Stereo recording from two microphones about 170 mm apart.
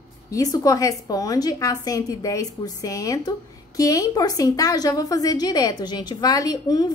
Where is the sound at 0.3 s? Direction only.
20° left (ahead or behind).